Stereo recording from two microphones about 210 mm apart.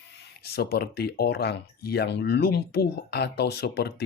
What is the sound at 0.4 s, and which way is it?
Speech, 50° left (ahead or behind).